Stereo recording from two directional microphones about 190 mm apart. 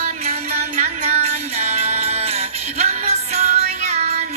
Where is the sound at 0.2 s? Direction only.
35° right (ahead or behind).